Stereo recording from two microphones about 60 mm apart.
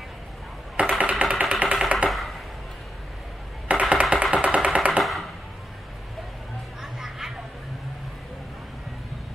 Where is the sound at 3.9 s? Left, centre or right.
Right.